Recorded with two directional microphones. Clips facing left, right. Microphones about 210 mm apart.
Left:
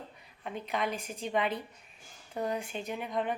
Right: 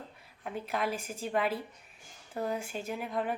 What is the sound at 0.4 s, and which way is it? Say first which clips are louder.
Speech: even; 5° right (ahead or behind).